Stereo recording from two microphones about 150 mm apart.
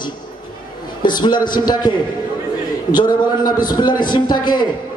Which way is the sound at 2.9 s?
30° left (ahead or behind).